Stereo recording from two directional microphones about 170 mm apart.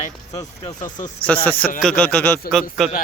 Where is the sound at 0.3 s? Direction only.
25° left (ahead or behind).